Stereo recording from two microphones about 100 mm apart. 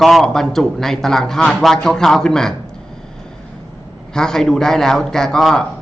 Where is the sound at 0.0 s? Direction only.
Centre (ahead or behind).